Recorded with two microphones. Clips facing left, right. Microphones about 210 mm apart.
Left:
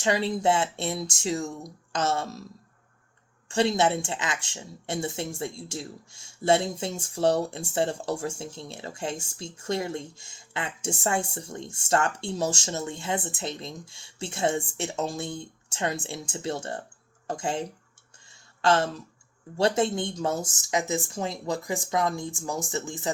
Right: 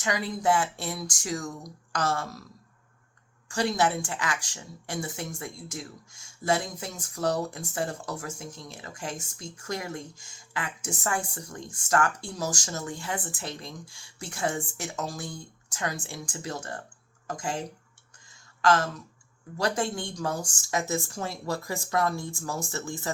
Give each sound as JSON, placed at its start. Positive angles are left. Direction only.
{"t": 0.0, "sound": "speech", "side_deg": 30}
{"t": 3.5, "sound": "speech", "side_deg": 25}
{"t": 18.6, "sound": "speech", "side_deg": 30}